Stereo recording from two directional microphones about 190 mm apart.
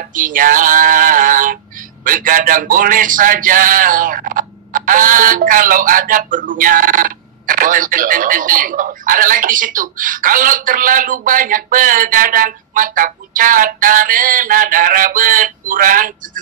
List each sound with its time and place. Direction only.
0.0 s music: 45° right (ahead or behind)
2.0 s speech: 45° right (ahead or behind)